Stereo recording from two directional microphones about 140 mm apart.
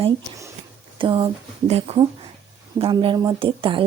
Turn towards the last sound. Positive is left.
turn(degrees=-35)  # may be behind; listen again after turning